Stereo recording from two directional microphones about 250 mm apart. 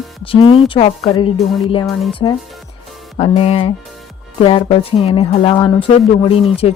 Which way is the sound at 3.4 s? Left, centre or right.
Left.